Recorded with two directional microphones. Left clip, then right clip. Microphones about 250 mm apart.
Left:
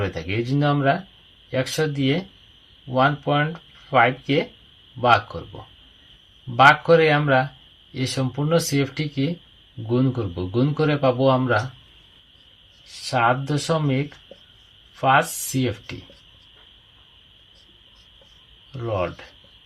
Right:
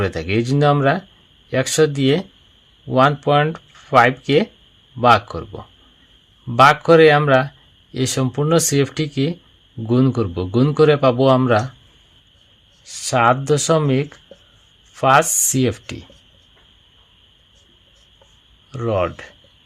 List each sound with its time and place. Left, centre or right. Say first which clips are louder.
0.0 s a man's voice: right 6 dB; right
6.6 s a man's voice: right 4 dB; right
12.8 s a man's voice: right 5 dB; right
15.0 s a man's voice: right 5 dB; right
18.7 s a man's voice: right 6 dB; right